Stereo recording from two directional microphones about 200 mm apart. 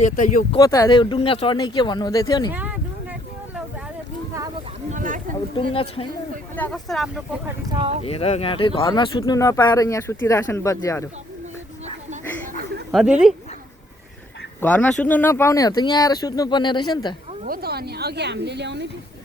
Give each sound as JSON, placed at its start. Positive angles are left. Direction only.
{"t": 0.0, "sound": "speech", "side_deg": 40}
{"t": 0.5, "sound": "speech", "side_deg": 15}
{"t": 2.5, "sound": "a sound", "side_deg": -10}
{"t": 4.9, "sound": "a sound", "side_deg": -40}
{"t": 5.7, "sound": "speech", "side_deg": 30}
{"t": 6.6, "sound": "speech", "side_deg": 0}
{"t": 7.7, "sound": "speech", "side_deg": -25}
{"t": 8.0, "sound": "speech", "side_deg": 30}
{"t": 12.9, "sound": "speech", "side_deg": -5}
{"t": 14.6, "sound": "speech", "side_deg": 5}
{"t": 17.4, "sound": "speech", "side_deg": -50}